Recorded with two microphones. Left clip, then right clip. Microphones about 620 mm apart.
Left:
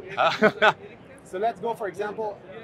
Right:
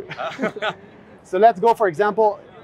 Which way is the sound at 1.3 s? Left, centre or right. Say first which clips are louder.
Right 13 dB; right.